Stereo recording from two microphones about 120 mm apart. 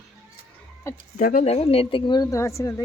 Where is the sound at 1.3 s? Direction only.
60° left (ahead or behind); by 2.4 s 35° left (ahead or behind).